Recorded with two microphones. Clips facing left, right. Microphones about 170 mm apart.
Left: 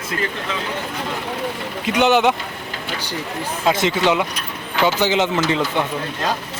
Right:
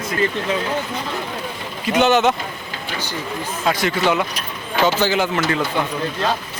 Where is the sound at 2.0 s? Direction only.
15° left (ahead or behind).